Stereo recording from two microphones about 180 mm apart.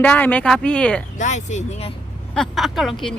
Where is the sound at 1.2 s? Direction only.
40° left (ahead or behind).